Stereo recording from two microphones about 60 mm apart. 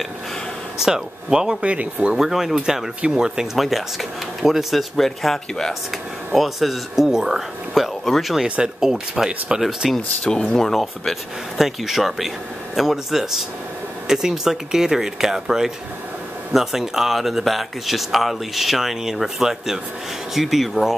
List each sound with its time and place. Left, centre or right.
0.7 s speech: centre
2.1 s speech: centre
9.9 s speech: centre